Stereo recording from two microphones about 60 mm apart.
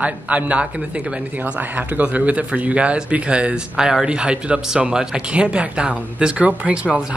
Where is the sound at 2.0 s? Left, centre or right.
Right.